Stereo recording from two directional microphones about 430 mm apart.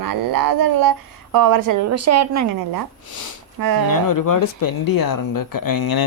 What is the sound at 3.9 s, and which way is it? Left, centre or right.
Speech, left.